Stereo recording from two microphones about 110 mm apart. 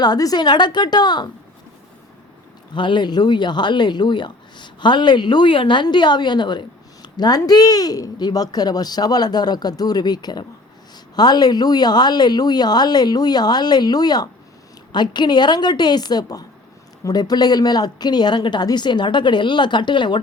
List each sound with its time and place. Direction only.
0.0 s speech: 35° left (ahead or behind)
2.7 s speech: 45° left (ahead or behind)